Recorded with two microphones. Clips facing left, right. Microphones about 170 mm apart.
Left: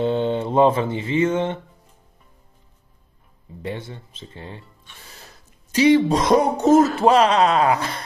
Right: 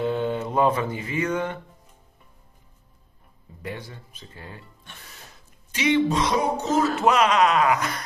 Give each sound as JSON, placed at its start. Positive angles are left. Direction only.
{"t": 0.0, "sound": "music", "side_deg": 25}
{"t": 3.6, "sound": "speech", "side_deg": 25}
{"t": 5.7, "sound": "speech", "side_deg": 35}
{"t": 7.0, "sound": "speech", "side_deg": 30}